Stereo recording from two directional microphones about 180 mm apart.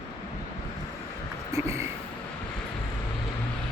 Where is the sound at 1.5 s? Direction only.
15° right (ahead or behind).